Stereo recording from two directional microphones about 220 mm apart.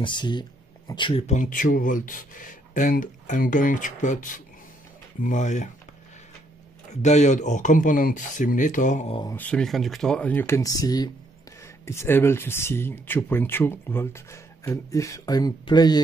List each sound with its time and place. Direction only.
0.0 s speech: 20° left (ahead or behind)
7.0 s speech: 30° left (ahead or behind)
9.3 s speech: 5° left (ahead or behind)